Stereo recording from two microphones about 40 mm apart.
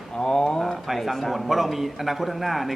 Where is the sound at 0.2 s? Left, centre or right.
Centre.